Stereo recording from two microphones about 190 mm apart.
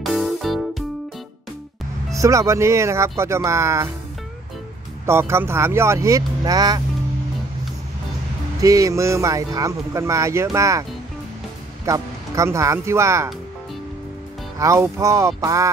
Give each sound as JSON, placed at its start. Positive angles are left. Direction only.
{"t": 0.0, "sound": "music", "side_deg": 0}
{"t": 2.1, "sound": "speech", "side_deg": -15}
{"t": 5.0, "sound": "speech", "side_deg": -15}
{"t": 8.5, "sound": "speech", "side_deg": -15}
{"t": 14.6, "sound": "speech", "side_deg": -15}